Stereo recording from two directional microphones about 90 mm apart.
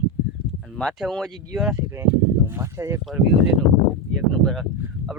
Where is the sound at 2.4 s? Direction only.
30° right (ahead or behind).